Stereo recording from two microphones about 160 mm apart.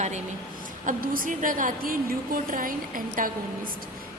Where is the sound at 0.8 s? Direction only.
60° right (ahead or behind).